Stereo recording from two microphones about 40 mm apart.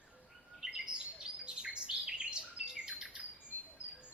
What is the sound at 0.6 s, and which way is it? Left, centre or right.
Chirp, centre.